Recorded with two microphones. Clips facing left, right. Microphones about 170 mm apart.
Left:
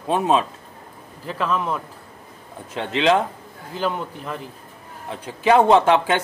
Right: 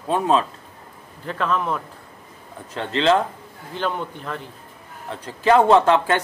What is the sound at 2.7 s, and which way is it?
Speech, 15° left (ahead or behind).